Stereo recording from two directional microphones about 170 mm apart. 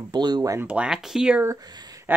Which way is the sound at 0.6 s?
5° right (ahead or behind).